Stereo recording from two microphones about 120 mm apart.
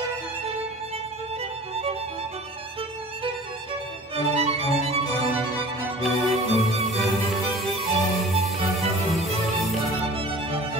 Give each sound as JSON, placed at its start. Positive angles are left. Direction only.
{"t": 4.4, "sound": "music", "side_deg": -60}
{"t": 6.0, "sound": "music", "side_deg": 0}